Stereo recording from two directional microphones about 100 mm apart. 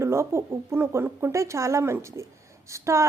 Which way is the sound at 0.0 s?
25° right (ahead or behind).